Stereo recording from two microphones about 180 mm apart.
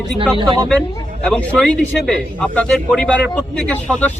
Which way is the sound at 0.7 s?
5° left (ahead or behind).